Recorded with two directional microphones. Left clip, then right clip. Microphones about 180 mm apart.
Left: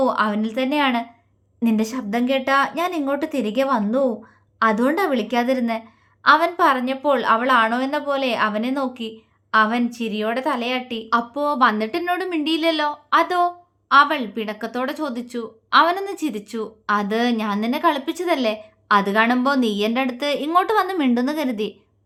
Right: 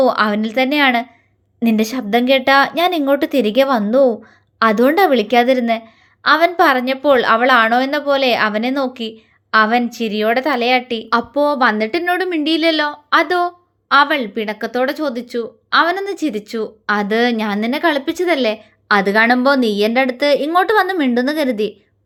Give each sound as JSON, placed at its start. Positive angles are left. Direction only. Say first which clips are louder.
{"t": 0.0, "sound": "a woman's voice", "louder": "right 5 dB", "side_deg": -20}